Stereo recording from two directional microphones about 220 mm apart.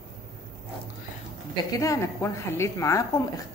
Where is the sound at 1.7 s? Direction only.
15° left (ahead or behind).